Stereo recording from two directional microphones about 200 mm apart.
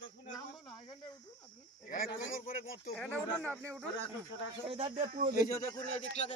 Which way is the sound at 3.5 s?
10° right (ahead or behind).